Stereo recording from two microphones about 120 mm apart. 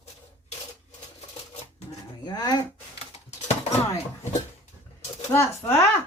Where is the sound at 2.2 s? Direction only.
35° left (ahead or behind).